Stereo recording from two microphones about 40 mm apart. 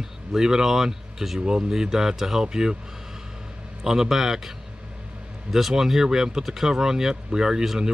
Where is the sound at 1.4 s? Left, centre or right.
Centre.